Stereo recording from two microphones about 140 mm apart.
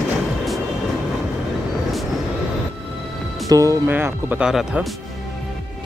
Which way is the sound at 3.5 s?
25° right (ahead or behind).